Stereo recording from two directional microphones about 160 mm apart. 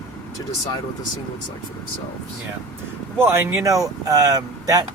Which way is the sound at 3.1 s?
15° right (ahead or behind).